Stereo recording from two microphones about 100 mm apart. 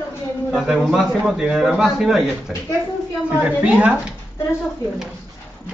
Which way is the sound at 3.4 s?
15° right (ahead or behind).